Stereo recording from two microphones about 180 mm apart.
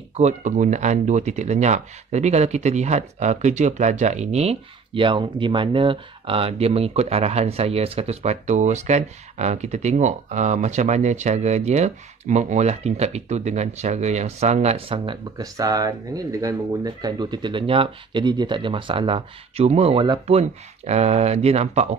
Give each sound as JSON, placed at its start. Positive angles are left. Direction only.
{"t": 0.1, "sound": "speech", "side_deg": -40}
{"t": 15.3, "sound": "speech", "side_deg": -20}